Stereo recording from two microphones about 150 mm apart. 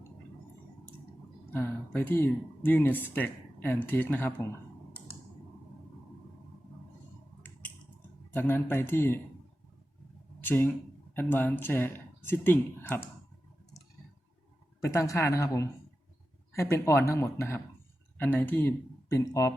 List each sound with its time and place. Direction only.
1.5 s speech: 10° left (ahead or behind)
8.3 s speech: 15° left (ahead or behind)
10.4 s speech: 15° left (ahead or behind)
14.8 s a woman's voice: 20° left (ahead or behind)